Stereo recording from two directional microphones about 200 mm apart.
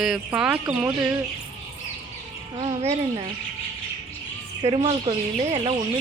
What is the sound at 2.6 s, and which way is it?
Speech, 30° right (ahead or behind).